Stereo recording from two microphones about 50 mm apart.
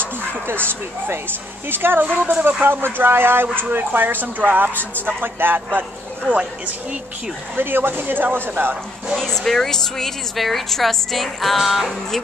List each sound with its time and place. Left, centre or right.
0.0 s speech: right
7.5 s speech: right
9.2 s a woman's voice: centre